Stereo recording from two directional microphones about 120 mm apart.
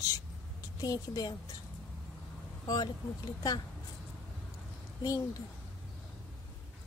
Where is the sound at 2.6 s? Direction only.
30° left (ahead or behind).